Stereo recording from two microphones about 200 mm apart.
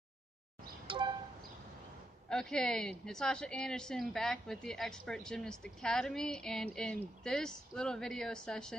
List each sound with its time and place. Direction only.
0.8 s vehicle: 25° right (ahead or behind)
2.2 s a woman's voice: 5° left (ahead or behind)